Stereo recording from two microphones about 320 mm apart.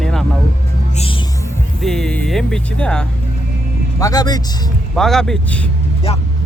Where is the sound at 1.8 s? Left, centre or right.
Centre.